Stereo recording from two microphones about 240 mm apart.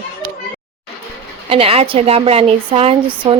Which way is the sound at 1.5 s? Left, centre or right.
Right.